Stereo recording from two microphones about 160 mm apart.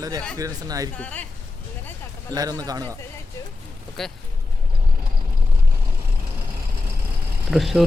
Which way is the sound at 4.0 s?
Centre (ahead or behind).